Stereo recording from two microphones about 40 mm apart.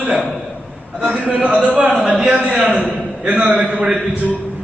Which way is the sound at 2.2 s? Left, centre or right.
Right.